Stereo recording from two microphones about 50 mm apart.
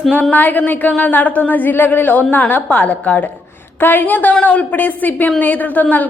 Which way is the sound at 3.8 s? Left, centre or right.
Left.